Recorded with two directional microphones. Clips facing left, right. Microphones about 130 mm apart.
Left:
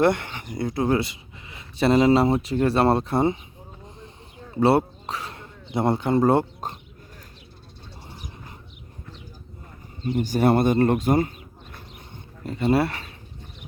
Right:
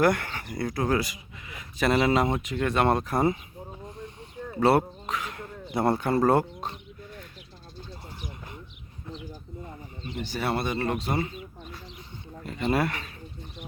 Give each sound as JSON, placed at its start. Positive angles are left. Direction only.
{"t": 0.0, "sound": "speech", "side_deg": 25}
{"t": 4.5, "sound": "speech", "side_deg": 25}
{"t": 6.6, "sound": "bird", "side_deg": 45}
{"t": 10.2, "sound": "speech", "side_deg": 45}
{"t": 12.5, "sound": "speech", "side_deg": 30}